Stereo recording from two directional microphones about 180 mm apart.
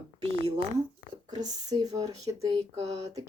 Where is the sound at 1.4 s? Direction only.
20° right (ahead or behind).